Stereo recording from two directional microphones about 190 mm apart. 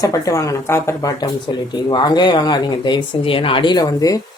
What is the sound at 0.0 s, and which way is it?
Speech, 15° left (ahead or behind).